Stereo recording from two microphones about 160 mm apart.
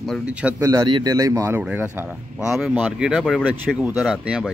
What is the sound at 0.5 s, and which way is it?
A man's voice, 20° right (ahead or behind).